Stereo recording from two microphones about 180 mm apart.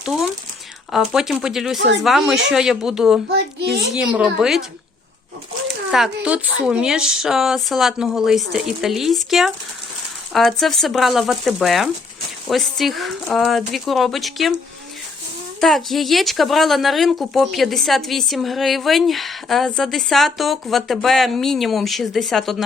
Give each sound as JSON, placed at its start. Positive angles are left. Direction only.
{"t": 0.9, "sound": "speech", "side_deg": 0}
{"t": 3.2, "sound": "a child's voice", "side_deg": -65}
{"t": 3.9, "sound": "speech", "side_deg": -5}
{"t": 5.6, "sound": "speech", "side_deg": 0}
{"t": 15.6, "sound": "speech", "side_deg": 0}